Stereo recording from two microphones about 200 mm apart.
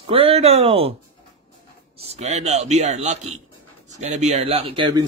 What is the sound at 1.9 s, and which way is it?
A man's voice, 30° right (ahead or behind).